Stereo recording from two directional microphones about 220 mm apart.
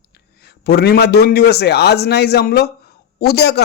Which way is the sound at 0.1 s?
45° left (ahead or behind).